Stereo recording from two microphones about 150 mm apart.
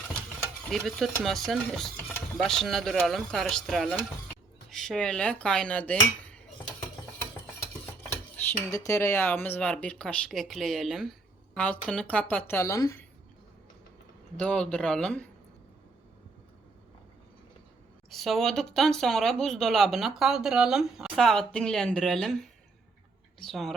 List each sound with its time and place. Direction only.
0.7 s speech: centre (ahead or behind)
8.6 s speech: 20° left (ahead or behind)
14.3 s speech: 5° left (ahead or behind)
18.1 s speech: centre (ahead or behind)